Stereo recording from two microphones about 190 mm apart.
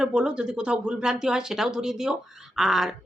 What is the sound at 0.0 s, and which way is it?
Speech, 5° right (ahead or behind).